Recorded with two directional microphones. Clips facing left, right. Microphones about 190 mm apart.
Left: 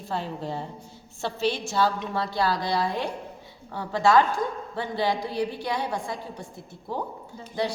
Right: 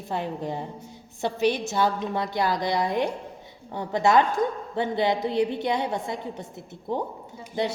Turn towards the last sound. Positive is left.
turn(degrees=-25)  # may be behind; listen again after turning